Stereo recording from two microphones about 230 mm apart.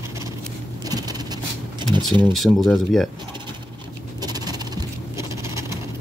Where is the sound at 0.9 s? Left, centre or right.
Centre.